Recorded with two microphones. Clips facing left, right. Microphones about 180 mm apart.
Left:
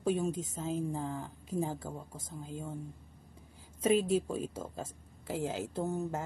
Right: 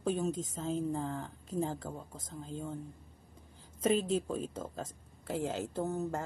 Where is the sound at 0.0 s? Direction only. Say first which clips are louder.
Left 1 dB; 10° left (ahead or behind).